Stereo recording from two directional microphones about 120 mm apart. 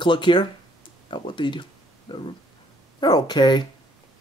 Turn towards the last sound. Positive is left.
turn(degrees=35)  # may be behind; listen again after turning